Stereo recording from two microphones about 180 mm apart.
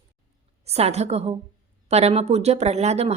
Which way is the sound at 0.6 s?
35° right (ahead or behind).